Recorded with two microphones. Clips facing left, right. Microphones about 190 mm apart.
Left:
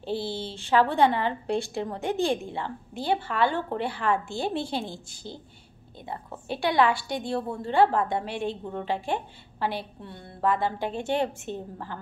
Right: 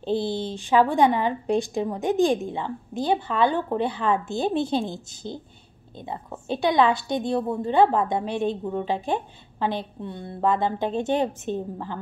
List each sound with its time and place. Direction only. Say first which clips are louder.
0.0 s a woman's voice: right 5 dB; 20° right (ahead or behind)